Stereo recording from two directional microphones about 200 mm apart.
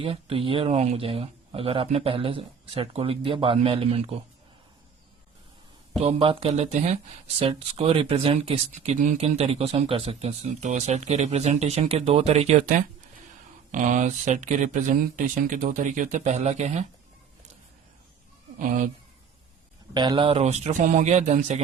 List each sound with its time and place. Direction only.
0.0 s speech: 30° right (ahead or behind)
6.0 s speech: 30° right (ahead or behind)
19.9 s speech: 20° right (ahead or behind)